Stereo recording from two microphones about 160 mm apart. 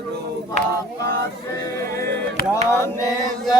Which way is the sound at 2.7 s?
15° left (ahead or behind).